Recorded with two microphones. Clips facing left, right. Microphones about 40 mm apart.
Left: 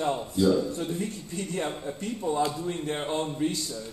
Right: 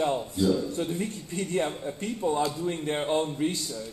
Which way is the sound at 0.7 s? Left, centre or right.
Centre.